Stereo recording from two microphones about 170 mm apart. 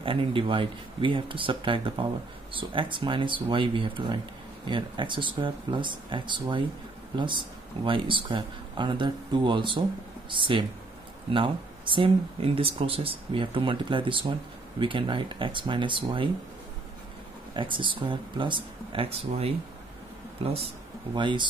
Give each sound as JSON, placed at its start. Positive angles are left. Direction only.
{"t": 0.0, "sound": "speech", "side_deg": -30}
{"t": 17.6, "sound": "speech", "side_deg": -30}
{"t": 21.1, "sound": "speech", "side_deg": -30}